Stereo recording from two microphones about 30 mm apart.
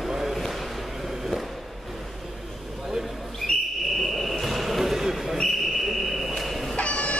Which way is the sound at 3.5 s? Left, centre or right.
Left.